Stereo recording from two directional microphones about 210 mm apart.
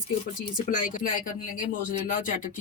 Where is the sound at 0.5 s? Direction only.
40° left (ahead or behind).